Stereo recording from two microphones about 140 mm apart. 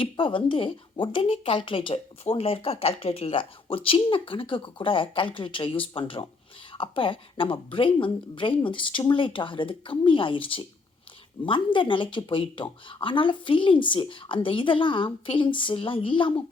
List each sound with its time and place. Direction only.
0.0 s a woman's voice: 35° left (ahead or behind)